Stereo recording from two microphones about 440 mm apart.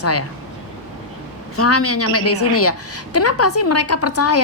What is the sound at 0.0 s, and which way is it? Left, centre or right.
Speech, left.